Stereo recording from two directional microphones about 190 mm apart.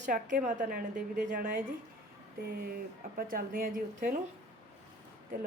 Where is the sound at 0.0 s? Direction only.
40° right (ahead or behind).